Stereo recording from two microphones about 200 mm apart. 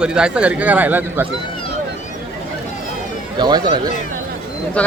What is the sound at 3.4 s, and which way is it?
Speech, 20° right (ahead or behind).